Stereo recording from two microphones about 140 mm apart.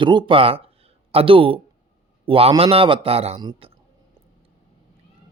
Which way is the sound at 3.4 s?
30° right (ahead or behind).